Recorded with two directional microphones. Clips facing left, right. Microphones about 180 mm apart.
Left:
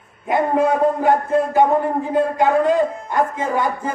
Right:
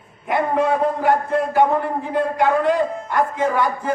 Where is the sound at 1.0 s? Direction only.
20° left (ahead or behind).